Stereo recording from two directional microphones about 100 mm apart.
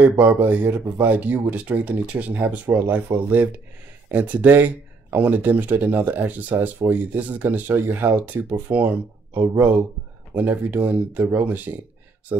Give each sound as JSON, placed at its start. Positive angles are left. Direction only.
{"t": 0.0, "sound": "speech", "side_deg": -15}